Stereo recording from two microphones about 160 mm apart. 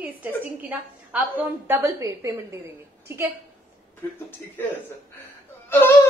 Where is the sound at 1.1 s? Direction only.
10° right (ahead or behind).